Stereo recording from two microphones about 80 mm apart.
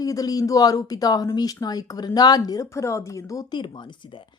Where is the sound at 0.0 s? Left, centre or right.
Left.